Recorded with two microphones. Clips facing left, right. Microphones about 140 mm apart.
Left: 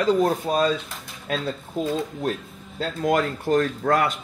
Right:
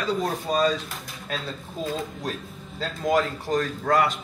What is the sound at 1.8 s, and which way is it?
A man's voice, 65° left (ahead or behind).